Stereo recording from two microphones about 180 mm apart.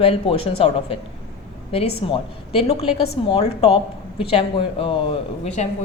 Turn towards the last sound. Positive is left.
turn(degrees=35)  # may be behind; listen again after turning